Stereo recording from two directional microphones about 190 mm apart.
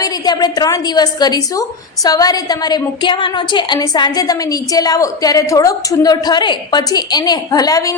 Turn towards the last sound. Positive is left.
turn(degrees=20)  # may be behind; listen again after turning